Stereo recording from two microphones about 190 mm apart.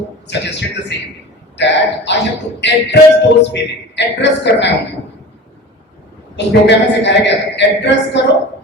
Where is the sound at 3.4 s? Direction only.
65° left (ahead or behind).